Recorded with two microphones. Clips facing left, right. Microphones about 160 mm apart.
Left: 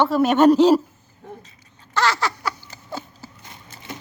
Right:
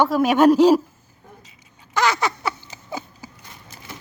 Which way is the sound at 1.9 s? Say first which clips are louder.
Right 1 dB; 20° right (ahead or behind).